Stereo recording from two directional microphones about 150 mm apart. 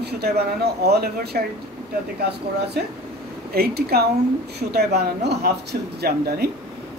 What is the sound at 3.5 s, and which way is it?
Speech, 90° right.